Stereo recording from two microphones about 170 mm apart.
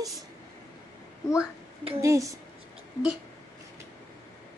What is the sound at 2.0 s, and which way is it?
Speech, 20° right (ahead or behind).